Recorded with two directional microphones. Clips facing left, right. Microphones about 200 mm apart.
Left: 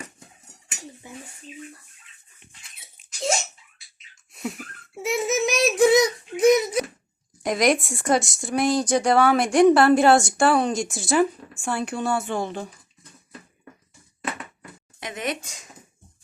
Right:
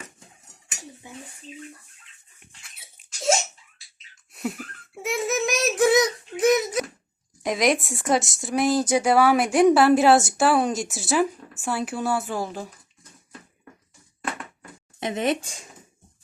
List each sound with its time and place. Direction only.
5.0 s a sound: centre (ahead or behind)
7.4 s speech: centre (ahead or behind)
15.0 s speech: 25° right (ahead or behind)